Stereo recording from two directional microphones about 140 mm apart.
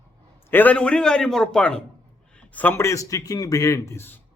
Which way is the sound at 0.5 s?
10° left (ahead or behind).